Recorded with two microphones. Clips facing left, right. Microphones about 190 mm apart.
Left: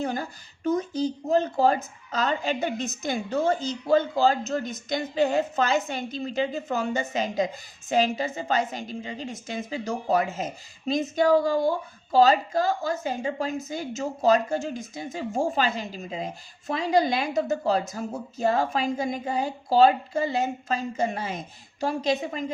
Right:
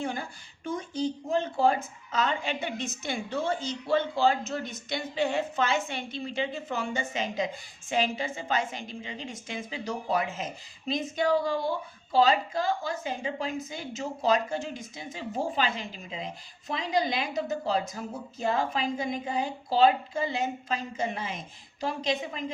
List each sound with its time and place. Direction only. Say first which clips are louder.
0.0 s a woman's voice: left 4 dB; 40° left (ahead or behind)